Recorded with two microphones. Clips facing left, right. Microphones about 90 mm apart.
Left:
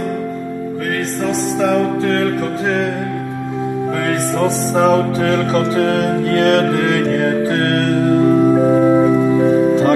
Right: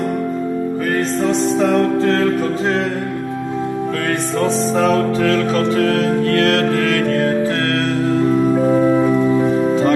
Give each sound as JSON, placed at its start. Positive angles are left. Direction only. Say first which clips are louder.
{"t": 1.2, "sound": "music", "louder": "even", "side_deg": 0}
{"t": 4.4, "sound": "music", "louder": "left 1 dB", "side_deg": 5}
{"t": 5.8, "sound": "music", "louder": "even", "side_deg": 20}
{"t": 7.6, "sound": "music", "louder": "left 2 dB", "side_deg": 40}
{"t": 8.2, "sound": "organ", "louder": "left 3 dB", "side_deg": 20}